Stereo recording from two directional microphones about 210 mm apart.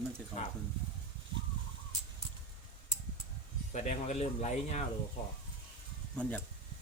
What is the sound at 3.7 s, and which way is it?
Speech, 35° left (ahead or behind).